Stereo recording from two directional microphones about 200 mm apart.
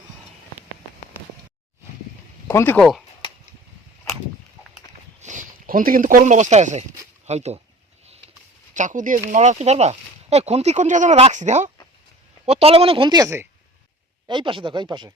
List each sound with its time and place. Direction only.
2.5 s speech: 10° left (ahead or behind)
5.2 s speech: 40° right (ahead or behind)
8.7 s speech: 40° right (ahead or behind); by 15.1 s 20° right (ahead or behind)